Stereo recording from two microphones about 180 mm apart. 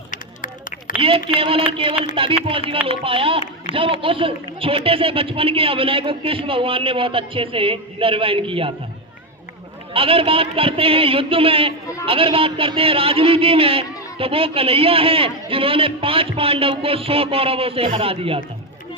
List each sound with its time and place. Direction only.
0.1 s run: 45° left (ahead or behind)
0.9 s speech: 30° right (ahead or behind)
3.7 s speech: 35° left (ahead or behind)
4.0 s speech: 30° right (ahead or behind)
9.9 s speech: 30° right (ahead or behind)